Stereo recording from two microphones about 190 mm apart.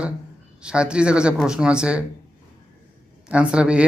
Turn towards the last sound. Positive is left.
turn(degrees=-5)  # may be behind; listen again after turning